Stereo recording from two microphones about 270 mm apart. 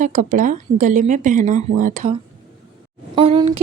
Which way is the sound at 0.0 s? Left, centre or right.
Right.